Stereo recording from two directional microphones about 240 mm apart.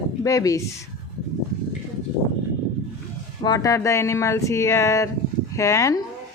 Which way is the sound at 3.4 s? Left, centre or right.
Centre.